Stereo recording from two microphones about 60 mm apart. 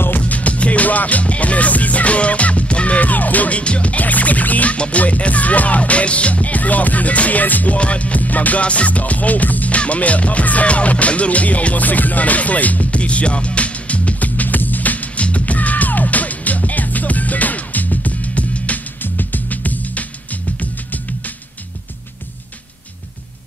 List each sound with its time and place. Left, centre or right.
0.2 s music: left